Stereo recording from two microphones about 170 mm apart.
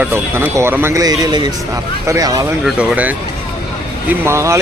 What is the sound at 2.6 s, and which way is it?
Speech, 10° right (ahead or behind).